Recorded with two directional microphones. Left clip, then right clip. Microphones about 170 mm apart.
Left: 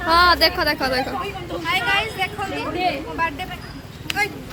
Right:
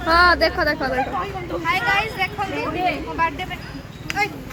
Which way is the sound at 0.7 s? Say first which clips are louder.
Left 1 dB; 5° left (ahead or behind).